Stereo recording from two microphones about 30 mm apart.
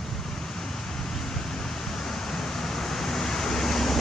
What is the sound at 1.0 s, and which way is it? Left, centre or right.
Vehicle, centre.